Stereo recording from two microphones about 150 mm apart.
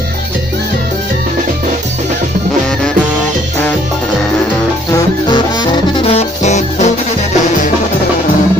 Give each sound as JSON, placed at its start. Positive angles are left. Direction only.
{"t": 4.9, "sound": "music", "side_deg": 30}
{"t": 6.1, "sound": "music", "side_deg": 50}